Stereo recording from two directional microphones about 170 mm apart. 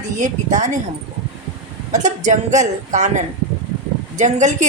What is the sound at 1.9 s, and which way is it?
A woman's voice, 45° right (ahead or behind).